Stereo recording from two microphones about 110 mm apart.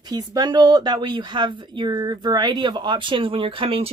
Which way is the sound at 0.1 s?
35° right (ahead or behind).